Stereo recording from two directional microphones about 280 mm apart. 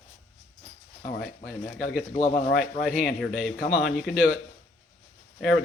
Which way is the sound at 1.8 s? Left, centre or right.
Left.